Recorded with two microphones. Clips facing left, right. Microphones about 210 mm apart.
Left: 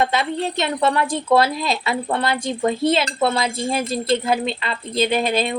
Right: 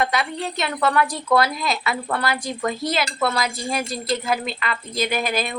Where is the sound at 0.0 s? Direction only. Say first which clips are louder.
Left 3 dB; 25° left (ahead or behind).